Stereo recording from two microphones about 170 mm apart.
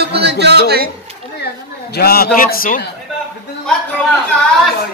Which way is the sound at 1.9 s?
65° left (ahead or behind).